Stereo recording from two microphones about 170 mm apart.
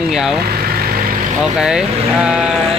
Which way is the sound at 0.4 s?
65° right (ahead or behind).